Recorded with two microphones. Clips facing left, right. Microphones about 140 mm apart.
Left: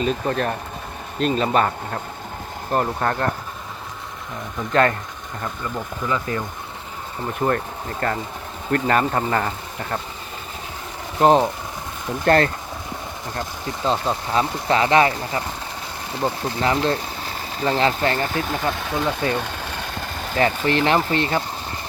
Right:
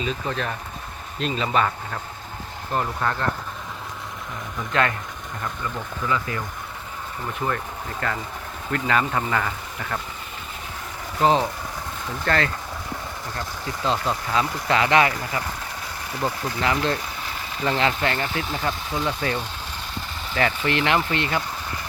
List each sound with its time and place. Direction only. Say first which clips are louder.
0.0 s speech: left 5 dB; 50° left (ahead or behind)
4.7 s speech: left 5 dB; 40° left (ahead or behind)
6.1 s speech: left 2 dB; 30° left (ahead or behind)
7.3 s speech: left 6 dB; 45° left (ahead or behind)
12.2 s speech: left 7 dB; 45° left (ahead or behind)
13.3 s speech: left 4 dB; 20° left (ahead or behind); by 18.6 s 45° left (ahead or behind)
18.7 s speech: left 3 dB; 60° left (ahead or behind); by 21.4 s 35° left (ahead or behind)